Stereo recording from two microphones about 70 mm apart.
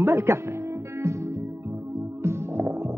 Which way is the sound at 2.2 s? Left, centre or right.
Right.